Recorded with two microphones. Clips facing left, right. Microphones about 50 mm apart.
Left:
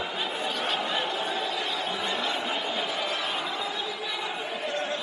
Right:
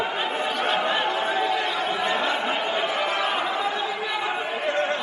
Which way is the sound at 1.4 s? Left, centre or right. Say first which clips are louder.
Right 6 dB; right.